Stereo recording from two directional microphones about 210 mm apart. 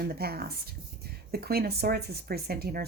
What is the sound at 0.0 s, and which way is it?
Speech, 45° right (ahead or behind).